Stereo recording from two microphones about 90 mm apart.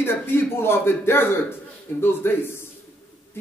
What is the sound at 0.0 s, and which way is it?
Speech, 25° left (ahead or behind).